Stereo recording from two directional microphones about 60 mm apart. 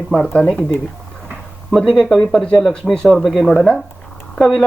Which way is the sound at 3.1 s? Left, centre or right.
Centre.